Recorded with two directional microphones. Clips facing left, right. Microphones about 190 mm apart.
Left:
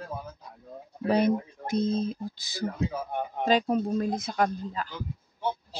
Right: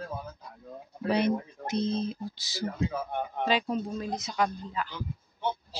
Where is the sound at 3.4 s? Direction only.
45° left (ahead or behind).